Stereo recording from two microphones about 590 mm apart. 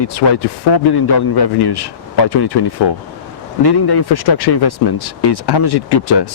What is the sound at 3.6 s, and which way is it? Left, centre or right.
Speech, left.